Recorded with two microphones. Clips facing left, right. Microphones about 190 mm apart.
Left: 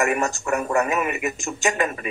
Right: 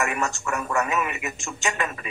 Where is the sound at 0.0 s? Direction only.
45° left (ahead or behind).